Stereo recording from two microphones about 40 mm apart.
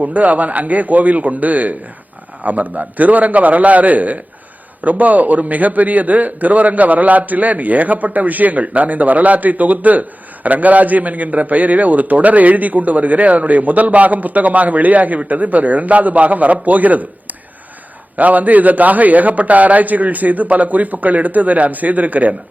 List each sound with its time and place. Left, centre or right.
0.0 s a man's voice: right